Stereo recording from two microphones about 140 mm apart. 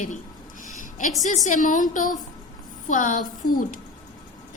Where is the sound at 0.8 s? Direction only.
70° left (ahead or behind).